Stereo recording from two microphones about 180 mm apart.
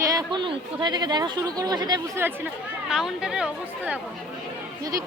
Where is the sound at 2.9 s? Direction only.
5° right (ahead or behind).